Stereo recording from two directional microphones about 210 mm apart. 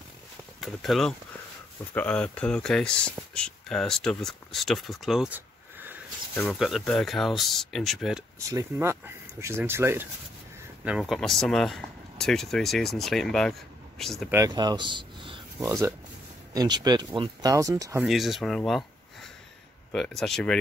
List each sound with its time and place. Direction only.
0.6 s speech: centre (ahead or behind)
8.4 s speech: 15° right (ahead or behind); by 14.3 s centre (ahead or behind)
14.3 s speech: 15° right (ahead or behind)
18.0 s speech: centre (ahead or behind)